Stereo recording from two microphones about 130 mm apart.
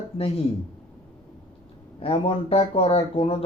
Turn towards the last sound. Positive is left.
turn(degrees=45)  # may be behind; listen again after turning